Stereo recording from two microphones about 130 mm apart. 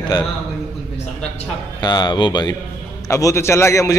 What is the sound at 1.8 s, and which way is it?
A man's voice, 30° left (ahead or behind).